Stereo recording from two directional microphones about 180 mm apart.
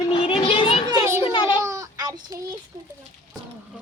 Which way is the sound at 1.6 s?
15° right (ahead or behind).